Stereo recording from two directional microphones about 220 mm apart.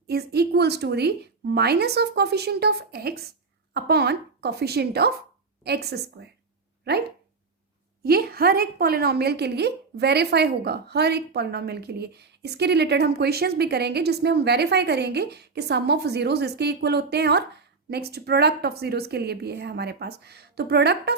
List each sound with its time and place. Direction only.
0.1 s a woman's voice: 45° right (ahead or behind)
8.0 s a woman's voice: 45° right (ahead or behind)